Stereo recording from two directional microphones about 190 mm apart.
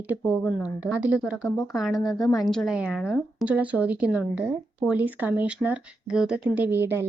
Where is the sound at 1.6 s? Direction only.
Centre (ahead or behind).